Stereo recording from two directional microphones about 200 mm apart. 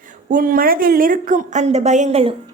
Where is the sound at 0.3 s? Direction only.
45° right (ahead or behind).